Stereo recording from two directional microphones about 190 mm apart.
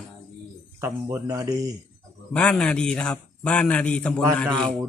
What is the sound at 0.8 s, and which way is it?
Speech, 15° right (ahead or behind).